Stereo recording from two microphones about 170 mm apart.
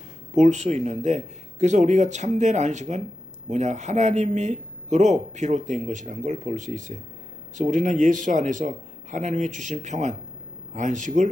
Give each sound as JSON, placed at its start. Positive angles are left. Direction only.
{"t": 0.3, "sound": "speech", "side_deg": -45}